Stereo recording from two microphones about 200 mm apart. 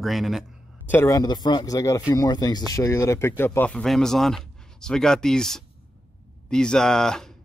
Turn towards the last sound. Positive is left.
turn(degrees=5)  # may be behind; listen again after turning